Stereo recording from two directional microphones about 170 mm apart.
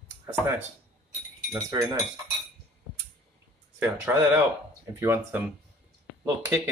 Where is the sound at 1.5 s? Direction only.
20° right (ahead or behind).